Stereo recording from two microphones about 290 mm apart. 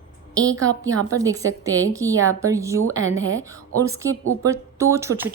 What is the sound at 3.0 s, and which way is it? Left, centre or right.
Speech, right.